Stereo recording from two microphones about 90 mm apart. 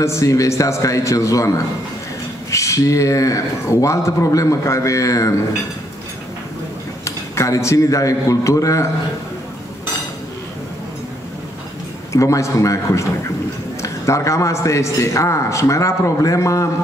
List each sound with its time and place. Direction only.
0.0 s a man's voice: 35° left (ahead or behind)
2.5 s a man's voice: 35° left (ahead or behind)
7.1 s a man's voice: 35° left (ahead or behind)
12.1 s a man's voice: 35° left (ahead or behind)